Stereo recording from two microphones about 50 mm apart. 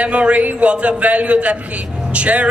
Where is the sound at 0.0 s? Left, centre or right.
Right.